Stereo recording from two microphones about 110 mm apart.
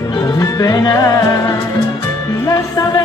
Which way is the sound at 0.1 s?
40° left (ahead or behind).